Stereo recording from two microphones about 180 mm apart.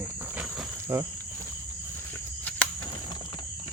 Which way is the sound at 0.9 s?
15° right (ahead or behind).